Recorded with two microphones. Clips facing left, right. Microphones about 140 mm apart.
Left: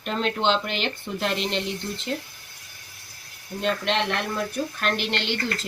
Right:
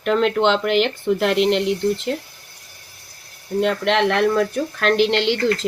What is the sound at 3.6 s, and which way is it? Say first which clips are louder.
Speech: right 5 dB; 85° right.